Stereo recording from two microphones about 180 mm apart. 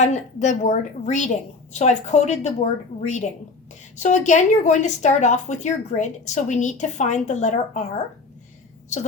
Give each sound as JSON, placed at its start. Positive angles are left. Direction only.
{"t": 0.0, "sound": "a woman's voice", "side_deg": 40}